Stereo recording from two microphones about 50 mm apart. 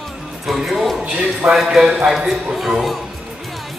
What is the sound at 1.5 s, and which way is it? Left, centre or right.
Speech, centre.